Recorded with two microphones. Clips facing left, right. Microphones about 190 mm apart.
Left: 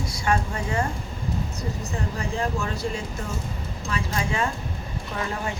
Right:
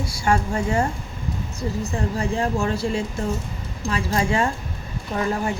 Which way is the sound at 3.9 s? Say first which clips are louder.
Right 6 dB; 30° right (ahead or behind).